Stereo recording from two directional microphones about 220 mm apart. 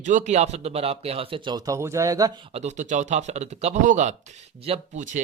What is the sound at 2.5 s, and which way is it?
Speech, 30° right (ahead or behind).